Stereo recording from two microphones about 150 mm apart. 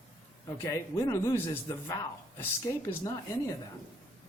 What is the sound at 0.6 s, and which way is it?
Speech, 20° left (ahead or behind).